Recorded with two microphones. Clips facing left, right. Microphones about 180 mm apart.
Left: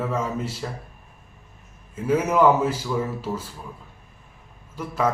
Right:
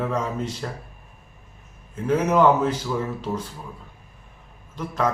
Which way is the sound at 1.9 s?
5° left (ahead or behind).